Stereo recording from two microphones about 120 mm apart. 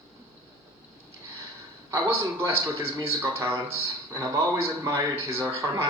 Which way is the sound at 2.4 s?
20° right (ahead or behind).